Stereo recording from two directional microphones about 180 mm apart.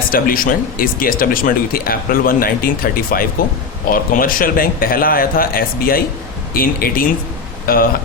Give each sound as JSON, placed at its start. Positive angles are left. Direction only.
{"t": 0.1, "sound": "speech", "side_deg": 50}